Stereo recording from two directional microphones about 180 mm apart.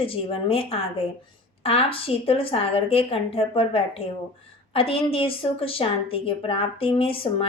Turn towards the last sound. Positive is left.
turn(degrees=30)  # may be behind; listen again after turning